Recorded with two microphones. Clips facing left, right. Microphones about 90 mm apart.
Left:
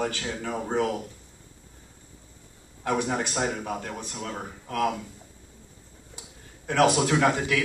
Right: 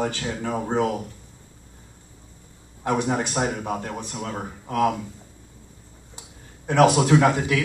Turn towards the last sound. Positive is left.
turn(degrees=-20)  # may be behind; listen again after turning